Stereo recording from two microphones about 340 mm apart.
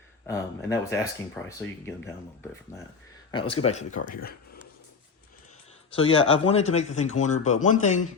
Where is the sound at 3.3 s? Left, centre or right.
Centre.